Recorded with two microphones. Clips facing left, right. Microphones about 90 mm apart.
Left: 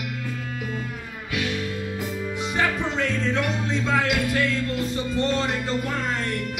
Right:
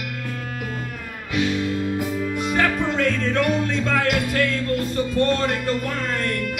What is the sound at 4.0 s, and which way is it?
Music, 55° right (ahead or behind).